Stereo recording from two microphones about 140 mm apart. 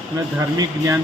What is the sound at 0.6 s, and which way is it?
Speech, 20° right (ahead or behind).